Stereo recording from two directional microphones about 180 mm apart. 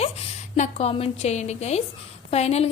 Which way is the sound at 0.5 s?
40° left (ahead or behind).